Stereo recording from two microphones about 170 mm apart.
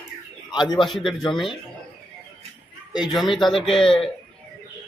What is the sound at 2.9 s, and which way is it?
Speech, centre (ahead or behind).